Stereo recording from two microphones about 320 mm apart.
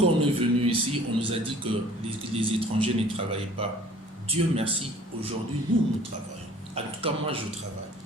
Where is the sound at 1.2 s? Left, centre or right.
Centre.